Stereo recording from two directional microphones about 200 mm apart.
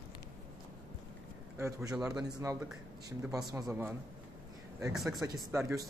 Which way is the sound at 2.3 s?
20° right (ahead or behind).